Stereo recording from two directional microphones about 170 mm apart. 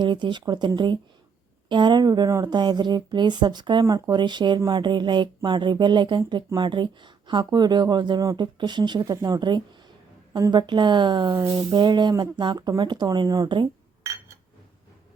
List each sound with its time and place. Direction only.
0.0 s speech: 25° right (ahead or behind)